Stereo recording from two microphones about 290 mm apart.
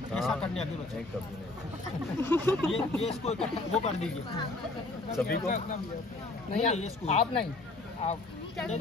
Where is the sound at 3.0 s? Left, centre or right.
Left.